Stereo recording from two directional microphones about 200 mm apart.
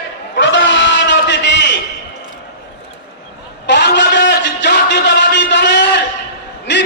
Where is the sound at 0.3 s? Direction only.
65° left (ahead or behind).